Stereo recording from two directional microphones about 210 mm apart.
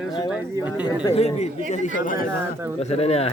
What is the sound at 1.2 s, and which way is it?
Speech, 30° left (ahead or behind).